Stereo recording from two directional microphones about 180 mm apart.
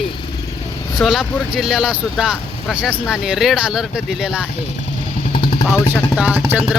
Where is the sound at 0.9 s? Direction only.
Centre (ahead or behind).